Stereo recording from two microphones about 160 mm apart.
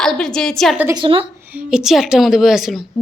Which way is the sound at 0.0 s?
5° left (ahead or behind).